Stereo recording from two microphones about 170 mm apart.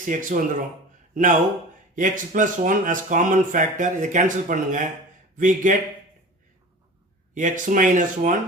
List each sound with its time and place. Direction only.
0.0 s speech: 50° right (ahead or behind)
7.3 s speech: 50° right (ahead or behind)